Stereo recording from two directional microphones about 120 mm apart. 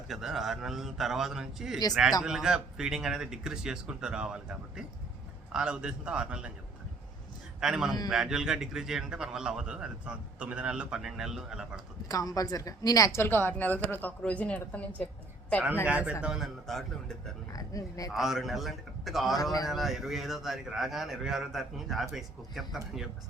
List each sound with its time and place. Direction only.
0.1 s a man's voice: 5° right (ahead or behind)
7.6 s a man's voice: 5° right (ahead or behind)
12.0 s a woman's voice: 30° left (ahead or behind)
13.1 s speech: 20° left (ahead or behind)
15.9 s a man's voice: 10° right (ahead or behind)
17.5 s speech: 30° left (ahead or behind)
18.1 s a man's voice: 5° right (ahead or behind)